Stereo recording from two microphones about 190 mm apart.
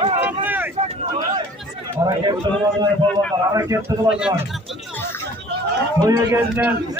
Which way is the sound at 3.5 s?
15° right (ahead or behind).